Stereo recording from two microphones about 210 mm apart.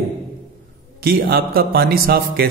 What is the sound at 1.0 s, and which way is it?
A man's voice, 45° right (ahead or behind).